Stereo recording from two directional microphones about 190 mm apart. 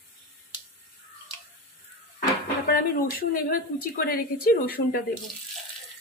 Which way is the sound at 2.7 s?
50° left (ahead or behind).